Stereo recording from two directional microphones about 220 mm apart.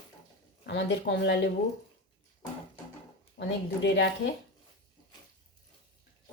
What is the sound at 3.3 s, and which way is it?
Speech, 55° left (ahead or behind).